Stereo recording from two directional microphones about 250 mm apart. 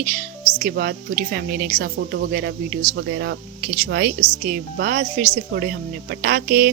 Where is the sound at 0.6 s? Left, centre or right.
Right.